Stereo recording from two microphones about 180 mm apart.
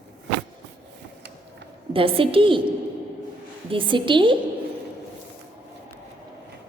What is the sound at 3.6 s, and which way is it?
Speech, 30° right (ahead or behind).